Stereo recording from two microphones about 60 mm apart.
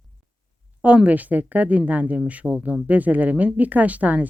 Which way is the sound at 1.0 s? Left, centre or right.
Right.